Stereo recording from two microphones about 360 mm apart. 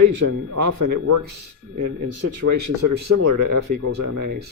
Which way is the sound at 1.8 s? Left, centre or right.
Right.